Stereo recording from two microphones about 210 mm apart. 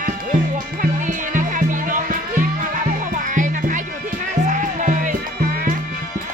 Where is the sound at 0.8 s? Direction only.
40° right (ahead or behind).